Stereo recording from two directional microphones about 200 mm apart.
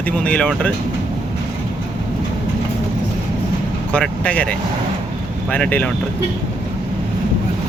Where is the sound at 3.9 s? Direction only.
5° left (ahead or behind).